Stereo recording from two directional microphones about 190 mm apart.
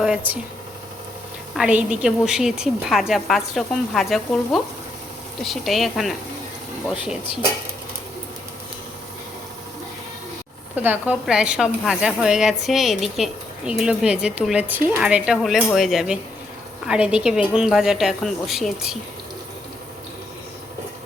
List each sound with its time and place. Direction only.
0.0 s speech: 5° right (ahead or behind)
1.5 s a woman's voice: 5° right (ahead or behind)
10.8 s a woman's voice: 10° right (ahead or behind)